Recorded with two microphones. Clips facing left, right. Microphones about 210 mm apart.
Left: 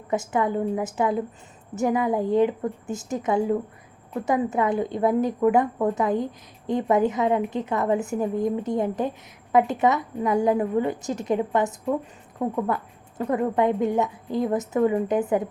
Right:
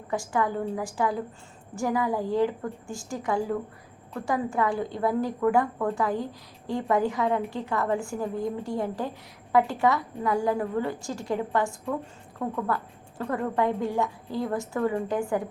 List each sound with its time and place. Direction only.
0.1 s a woman's voice: 20° left (ahead or behind)